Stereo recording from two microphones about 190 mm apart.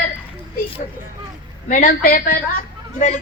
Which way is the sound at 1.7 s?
45° left (ahead or behind).